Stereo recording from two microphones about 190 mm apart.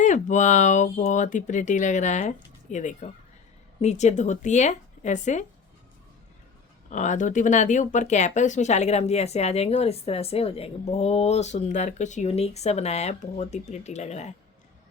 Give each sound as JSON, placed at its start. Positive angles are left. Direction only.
{"t": 0.0, "sound": "speech", "side_deg": 40}
{"t": 6.9, "sound": "speech", "side_deg": 40}